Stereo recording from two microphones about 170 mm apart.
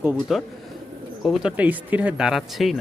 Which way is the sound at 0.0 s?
5° right (ahead or behind).